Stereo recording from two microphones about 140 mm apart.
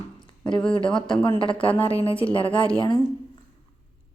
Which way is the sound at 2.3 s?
10° left (ahead or behind).